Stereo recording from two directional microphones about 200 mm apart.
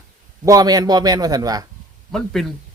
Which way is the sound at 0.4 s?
20° right (ahead or behind).